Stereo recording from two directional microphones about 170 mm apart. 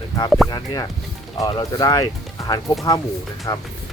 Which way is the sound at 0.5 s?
25° left (ahead or behind).